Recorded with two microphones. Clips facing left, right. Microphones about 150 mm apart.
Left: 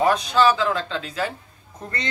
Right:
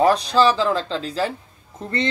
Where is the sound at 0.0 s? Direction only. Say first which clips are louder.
Right 2 dB; 35° right (ahead or behind).